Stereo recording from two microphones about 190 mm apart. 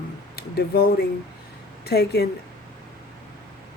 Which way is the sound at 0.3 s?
55° left (ahead or behind).